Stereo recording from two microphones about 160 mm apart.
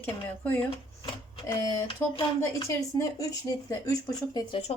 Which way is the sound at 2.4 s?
20° left (ahead or behind).